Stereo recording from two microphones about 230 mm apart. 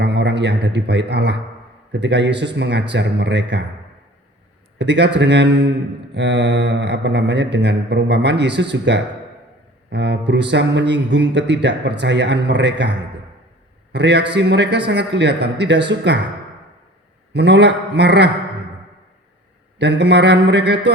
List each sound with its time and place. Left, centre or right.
0.0 s a man's voice: right
4.8 s speech: right
17.3 s speech: right
19.8 s speech: right